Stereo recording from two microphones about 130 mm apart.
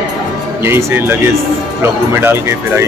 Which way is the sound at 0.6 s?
20° right (ahead or behind).